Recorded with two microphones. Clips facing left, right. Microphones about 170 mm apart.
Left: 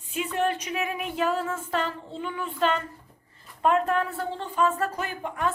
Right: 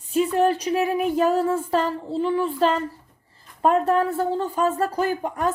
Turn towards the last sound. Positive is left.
turn(degrees=-40)  # may be behind; listen again after turning